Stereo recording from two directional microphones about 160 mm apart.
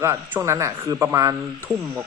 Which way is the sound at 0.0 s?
15° right (ahead or behind).